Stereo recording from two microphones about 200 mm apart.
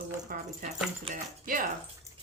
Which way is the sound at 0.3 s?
45° right (ahead or behind).